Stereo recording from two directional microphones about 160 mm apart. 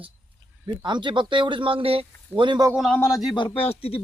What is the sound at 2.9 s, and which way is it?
Speech, 15° left (ahead or behind).